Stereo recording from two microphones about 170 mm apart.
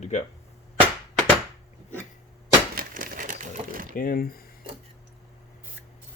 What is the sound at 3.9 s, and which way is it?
Speech, 55° left (ahead or behind).